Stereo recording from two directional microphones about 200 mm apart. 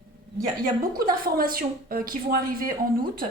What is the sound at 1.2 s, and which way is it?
A woman's voice, 45° right (ahead or behind).